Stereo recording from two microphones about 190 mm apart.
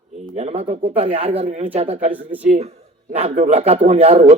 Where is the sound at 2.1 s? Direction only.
10° right (ahead or behind).